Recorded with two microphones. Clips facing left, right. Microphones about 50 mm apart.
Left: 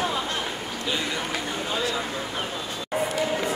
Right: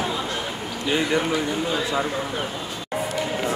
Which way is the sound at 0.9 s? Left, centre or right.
Right.